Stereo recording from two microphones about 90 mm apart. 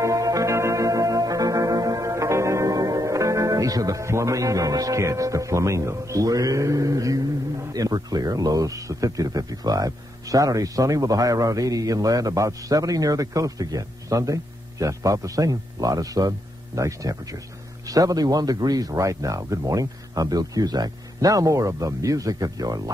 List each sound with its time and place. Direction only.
0.0 s music: 40° right (ahead or behind)
7.7 s speech: 45° right (ahead or behind)